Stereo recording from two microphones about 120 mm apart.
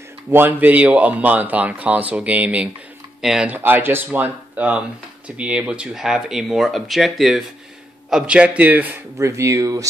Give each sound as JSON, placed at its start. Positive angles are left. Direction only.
{"t": 0.3, "sound": "speech", "side_deg": -15}
{"t": 9.2, "sound": "speech", "side_deg": -25}